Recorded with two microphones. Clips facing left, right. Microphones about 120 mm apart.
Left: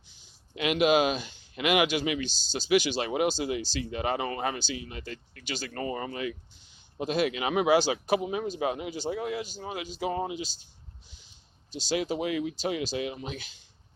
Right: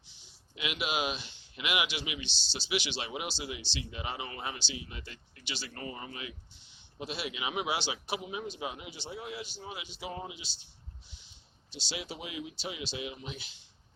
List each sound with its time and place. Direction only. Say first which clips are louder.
0.1 s speech: left 8 dB; 50° left (ahead or behind)
11.7 s speech: left 11 dB; 45° left (ahead or behind)